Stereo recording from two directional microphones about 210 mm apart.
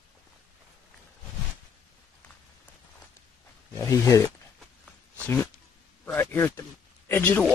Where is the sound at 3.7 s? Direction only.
15° left (ahead or behind).